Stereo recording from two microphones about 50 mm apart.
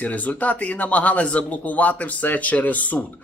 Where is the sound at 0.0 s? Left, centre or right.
Left.